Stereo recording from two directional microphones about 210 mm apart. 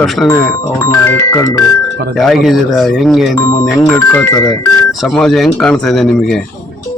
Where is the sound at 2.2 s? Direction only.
Centre (ahead or behind).